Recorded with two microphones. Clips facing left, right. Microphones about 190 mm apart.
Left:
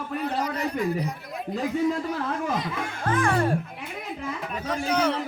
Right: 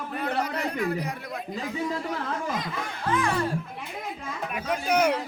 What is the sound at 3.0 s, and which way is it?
Speech, 50° left (ahead or behind).